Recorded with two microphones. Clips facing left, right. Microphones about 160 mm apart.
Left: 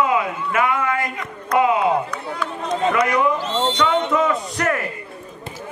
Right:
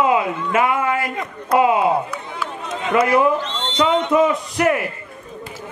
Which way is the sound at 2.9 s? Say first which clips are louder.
Right 6 dB; 30° right (ahead or behind).